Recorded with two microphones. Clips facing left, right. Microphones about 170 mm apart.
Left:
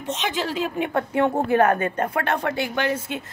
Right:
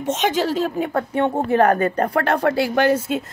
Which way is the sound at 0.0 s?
45° right (ahead or behind).